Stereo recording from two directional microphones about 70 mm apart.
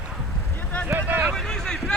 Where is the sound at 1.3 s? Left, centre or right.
Centre.